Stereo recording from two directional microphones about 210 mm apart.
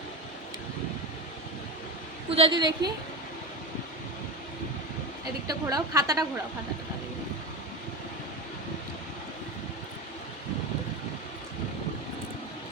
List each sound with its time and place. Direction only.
2.3 s a woman's voice: 25° right (ahead or behind)
5.5 s a woman's voice: 15° right (ahead or behind)